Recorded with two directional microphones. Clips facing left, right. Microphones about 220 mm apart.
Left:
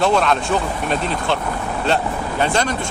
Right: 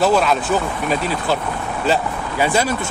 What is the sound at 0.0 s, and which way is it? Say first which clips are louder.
Speech: right 1 dB; 5° right (ahead or behind).